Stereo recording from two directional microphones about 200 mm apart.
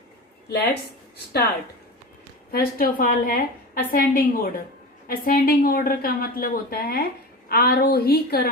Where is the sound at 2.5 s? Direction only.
45° left (ahead or behind).